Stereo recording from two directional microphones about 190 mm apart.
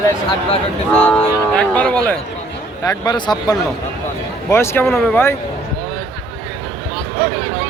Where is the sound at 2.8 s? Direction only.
15° left (ahead or behind).